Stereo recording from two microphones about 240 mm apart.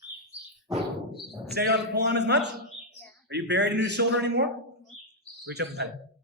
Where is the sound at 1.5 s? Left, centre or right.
Right.